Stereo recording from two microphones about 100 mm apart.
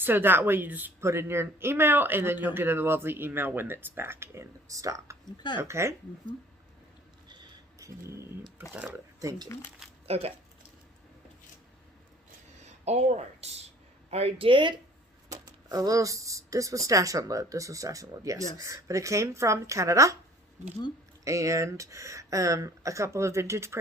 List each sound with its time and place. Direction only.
0.0 s speech: 20° right (ahead or behind)
7.8 s a sound: 30° right (ahead or behind)
8.7 s speech: 15° right (ahead or behind)
9.5 s speech: 30° left (ahead or behind)
10.1 s speech: 90° right
12.8 s speech: 90° right
14.1 s speech: 80° right; by 14.8 s 55° right (ahead or behind)
15.3 s speech: 35° right (ahead or behind)
21.2 s speech: 30° right (ahead or behind)